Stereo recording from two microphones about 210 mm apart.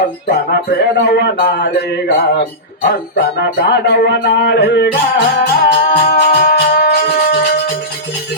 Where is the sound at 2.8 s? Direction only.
50° left (ahead or behind).